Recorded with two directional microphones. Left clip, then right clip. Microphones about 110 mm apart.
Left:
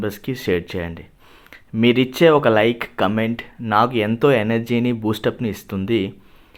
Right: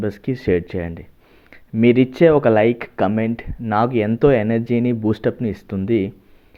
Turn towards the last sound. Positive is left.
turn(degrees=-30)  # may be behind; listen again after turning